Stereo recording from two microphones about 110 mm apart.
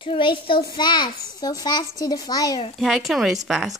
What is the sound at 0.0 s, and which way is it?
A child's voice, 50° left (ahead or behind).